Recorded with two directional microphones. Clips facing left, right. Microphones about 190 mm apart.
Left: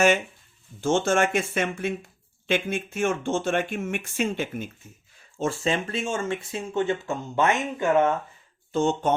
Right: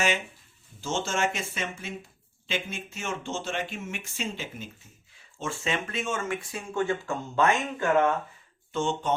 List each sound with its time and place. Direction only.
0.8 s speech: 55° left (ahead or behind)
5.4 s speech: 35° left (ahead or behind)
8.7 s speech: 40° left (ahead or behind)